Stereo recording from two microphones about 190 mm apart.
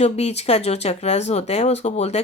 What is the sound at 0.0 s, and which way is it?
A woman's voice, 35° left (ahead or behind).